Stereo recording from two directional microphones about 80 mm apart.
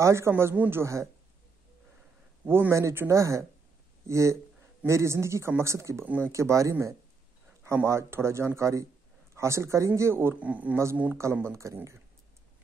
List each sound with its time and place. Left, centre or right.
0.0 s a man's voice: right
2.4 s a man's voice: right
10.3 s speech: centre
11.4 s a man's voice: right